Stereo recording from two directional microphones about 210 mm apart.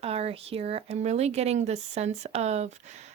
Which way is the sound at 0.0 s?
30° right (ahead or behind).